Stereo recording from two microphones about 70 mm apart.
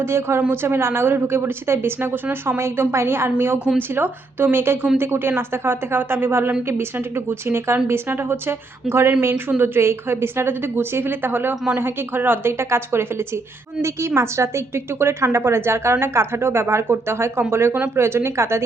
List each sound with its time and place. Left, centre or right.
0.0 s a woman's voice: right
2.6 s a woman's voice: right